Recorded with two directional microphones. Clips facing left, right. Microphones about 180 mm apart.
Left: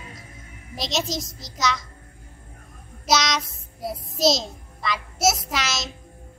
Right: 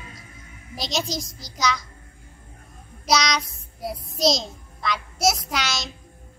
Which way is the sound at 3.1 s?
Centre (ahead or behind).